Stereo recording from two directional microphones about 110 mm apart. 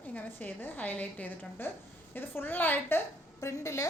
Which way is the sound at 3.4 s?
30° left (ahead or behind).